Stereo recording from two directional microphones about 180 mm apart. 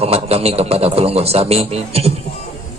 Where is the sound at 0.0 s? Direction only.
35° right (ahead or behind).